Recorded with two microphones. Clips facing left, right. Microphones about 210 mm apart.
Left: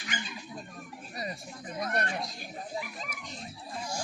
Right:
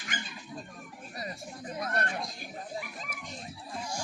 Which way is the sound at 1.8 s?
20° left (ahead or behind).